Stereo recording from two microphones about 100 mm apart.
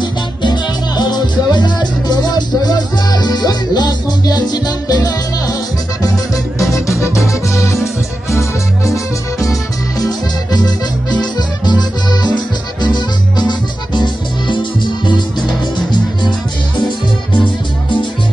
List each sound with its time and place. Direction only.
0.0 s music: 50° left (ahead or behind)
7.2 s music: centre (ahead or behind)
8.4 s music: 30° left (ahead or behind)
11.3 s accordion: 45° left (ahead or behind)
12.8 s music: 45° left (ahead or behind)
17.3 s music: 50° left (ahead or behind)